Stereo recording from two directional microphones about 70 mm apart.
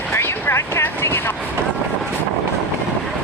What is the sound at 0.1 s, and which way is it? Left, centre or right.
Vehicle, left.